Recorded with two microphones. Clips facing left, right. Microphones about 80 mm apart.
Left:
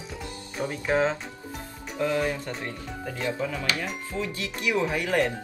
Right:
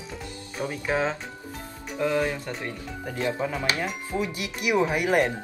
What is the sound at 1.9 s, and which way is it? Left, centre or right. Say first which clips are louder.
Speech: right 1 dB; right.